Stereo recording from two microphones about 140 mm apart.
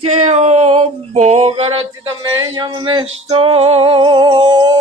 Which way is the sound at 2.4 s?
30° right (ahead or behind).